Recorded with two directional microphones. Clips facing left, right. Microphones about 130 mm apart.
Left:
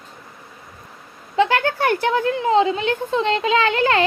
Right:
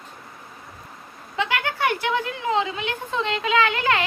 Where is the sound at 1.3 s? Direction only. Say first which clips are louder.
Left 8 dB; 35° left (ahead or behind).